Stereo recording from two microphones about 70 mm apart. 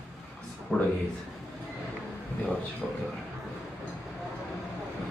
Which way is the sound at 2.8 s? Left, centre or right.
Centre.